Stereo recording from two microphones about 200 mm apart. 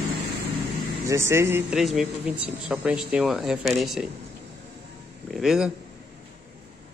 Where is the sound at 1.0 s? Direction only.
15° right (ahead or behind).